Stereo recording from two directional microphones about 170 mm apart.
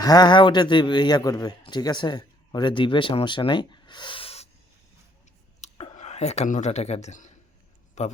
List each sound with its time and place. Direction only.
0.0 s a man's voice: 25° left (ahead or behind)
5.5 s a man's voice: 40° left (ahead or behind)